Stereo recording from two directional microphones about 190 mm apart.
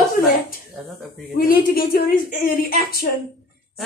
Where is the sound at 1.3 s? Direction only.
50° left (ahead or behind).